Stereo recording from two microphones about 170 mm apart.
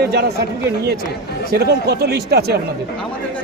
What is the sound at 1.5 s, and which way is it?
Speech, 75° right (ahead or behind).